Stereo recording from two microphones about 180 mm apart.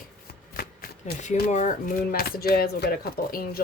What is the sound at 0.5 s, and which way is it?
Speech, 55° left (ahead or behind).